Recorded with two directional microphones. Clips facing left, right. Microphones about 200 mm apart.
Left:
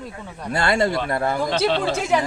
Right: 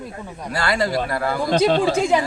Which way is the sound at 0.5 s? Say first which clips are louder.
Left 1 dB; 25° left (ahead or behind).